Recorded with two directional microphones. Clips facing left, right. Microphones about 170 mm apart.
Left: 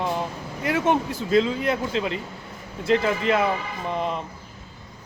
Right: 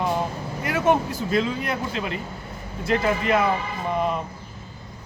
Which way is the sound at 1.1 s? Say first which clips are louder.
Left 3 dB; 25° left (ahead or behind).